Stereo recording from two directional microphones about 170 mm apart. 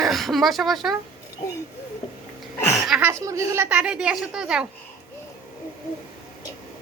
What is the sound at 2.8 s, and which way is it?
Speech, 5° right (ahead or behind).